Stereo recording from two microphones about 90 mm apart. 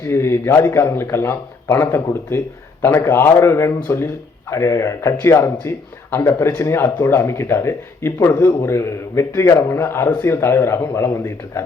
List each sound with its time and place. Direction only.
0.0 s speech: 30° left (ahead or behind)